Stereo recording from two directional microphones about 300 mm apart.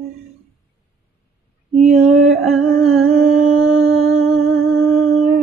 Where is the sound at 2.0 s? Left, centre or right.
Centre.